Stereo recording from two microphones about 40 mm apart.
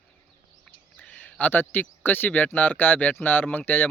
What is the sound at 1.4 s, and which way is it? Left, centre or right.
Speech, left.